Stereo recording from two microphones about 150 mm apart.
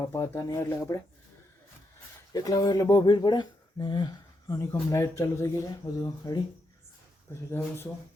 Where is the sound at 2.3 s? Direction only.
25° left (ahead or behind).